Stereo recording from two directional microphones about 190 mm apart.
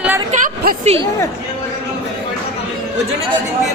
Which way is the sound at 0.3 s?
50° right (ahead or behind).